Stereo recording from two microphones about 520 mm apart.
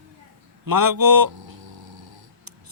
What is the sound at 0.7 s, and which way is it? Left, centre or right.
Snoring, right.